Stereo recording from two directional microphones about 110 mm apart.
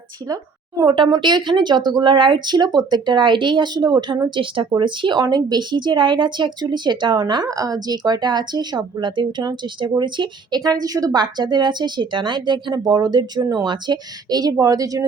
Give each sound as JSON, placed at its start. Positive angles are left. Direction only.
{"t": 0.9, "sound": "a woman's voice", "side_deg": -40}